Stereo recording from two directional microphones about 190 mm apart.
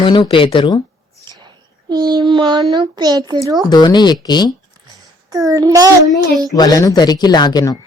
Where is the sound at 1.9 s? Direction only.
20° right (ahead or behind).